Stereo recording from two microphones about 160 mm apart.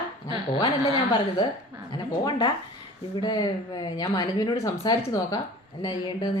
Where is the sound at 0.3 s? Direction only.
35° left (ahead or behind).